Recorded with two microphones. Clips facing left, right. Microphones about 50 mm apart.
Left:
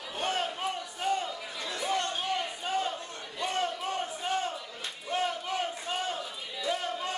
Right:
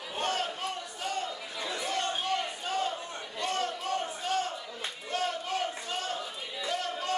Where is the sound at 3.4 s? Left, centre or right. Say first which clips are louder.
Left 1 dB; centre.